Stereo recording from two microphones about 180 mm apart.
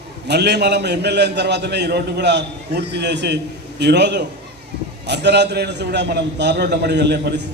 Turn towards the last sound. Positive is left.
turn(degrees=-70)  # may be behind; listen again after turning